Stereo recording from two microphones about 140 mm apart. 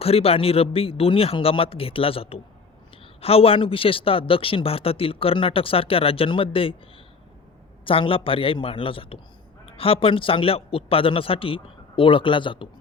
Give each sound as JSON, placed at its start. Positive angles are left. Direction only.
{"t": 0.0, "sound": "a man's voice", "side_deg": 45}
{"t": 7.9, "sound": "a man's voice", "side_deg": 40}